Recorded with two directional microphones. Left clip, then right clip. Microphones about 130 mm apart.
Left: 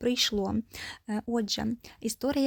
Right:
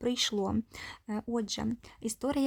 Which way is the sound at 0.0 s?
10° left (ahead or behind).